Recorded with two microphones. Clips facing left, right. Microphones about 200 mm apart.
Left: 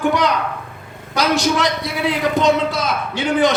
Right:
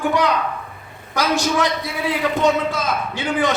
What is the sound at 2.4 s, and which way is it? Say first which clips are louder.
Speech: left 2 dB; 75° left (ahead or behind).